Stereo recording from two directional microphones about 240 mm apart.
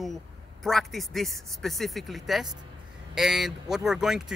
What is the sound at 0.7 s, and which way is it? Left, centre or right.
Speech, centre.